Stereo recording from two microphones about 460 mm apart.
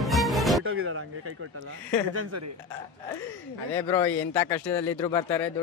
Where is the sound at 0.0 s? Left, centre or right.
Centre.